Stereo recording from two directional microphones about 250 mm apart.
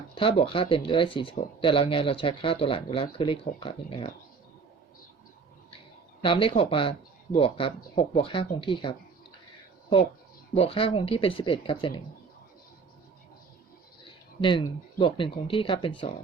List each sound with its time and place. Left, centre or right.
0.1 s speech: left
6.2 s speech: left
10.5 s speech: left
14.4 s speech: centre